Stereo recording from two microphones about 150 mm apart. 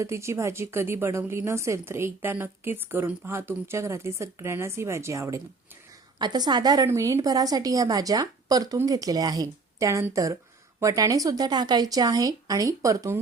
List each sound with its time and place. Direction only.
0.0 s a woman's voice: 20° right (ahead or behind)